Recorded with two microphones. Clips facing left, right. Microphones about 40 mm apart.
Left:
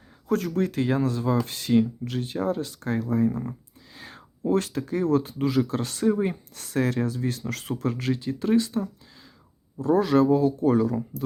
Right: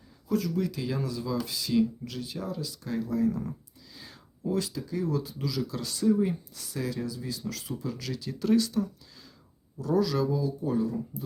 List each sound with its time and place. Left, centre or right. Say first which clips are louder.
0.3 s speech: left 4 dB; left
3.2 s speech: left 2 dB; left
3.9 s speech: left 6 dB; left